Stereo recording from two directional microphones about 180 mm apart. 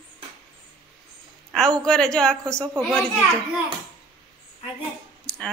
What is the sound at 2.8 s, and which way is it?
Speech, centre (ahead or behind).